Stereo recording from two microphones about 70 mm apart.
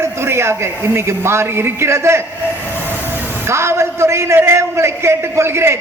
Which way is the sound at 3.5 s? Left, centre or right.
Right.